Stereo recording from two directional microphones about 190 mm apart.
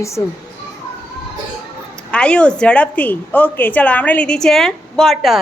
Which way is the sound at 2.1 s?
5° left (ahead or behind).